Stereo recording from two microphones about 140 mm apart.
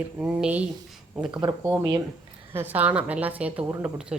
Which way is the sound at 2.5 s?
15° right (ahead or behind).